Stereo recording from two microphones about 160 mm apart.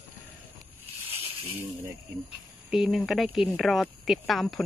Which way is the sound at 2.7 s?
Centre (ahead or behind).